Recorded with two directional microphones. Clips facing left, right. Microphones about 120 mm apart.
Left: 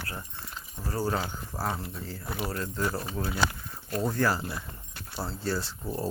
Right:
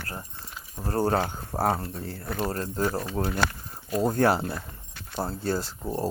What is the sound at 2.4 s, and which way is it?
Speech, 40° right (ahead or behind).